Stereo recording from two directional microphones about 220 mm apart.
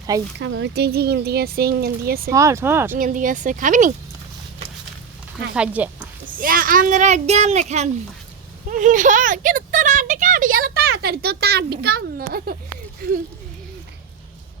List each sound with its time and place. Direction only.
0.3 s speech: 50° right (ahead or behind)
2.3 s speech: 15° right (ahead or behind)
3.0 s a child's voice: 35° right (ahead or behind)
5.5 s speech: 5° right (ahead or behind)
6.2 s a child's voice: 40° right (ahead or behind)